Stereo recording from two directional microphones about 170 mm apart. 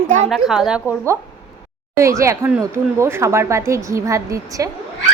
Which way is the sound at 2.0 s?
15° right (ahead or behind).